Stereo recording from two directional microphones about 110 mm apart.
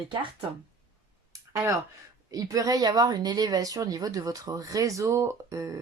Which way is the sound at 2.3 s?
35° right (ahead or behind).